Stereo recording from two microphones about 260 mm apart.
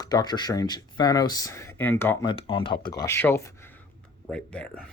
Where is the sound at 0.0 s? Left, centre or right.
Centre.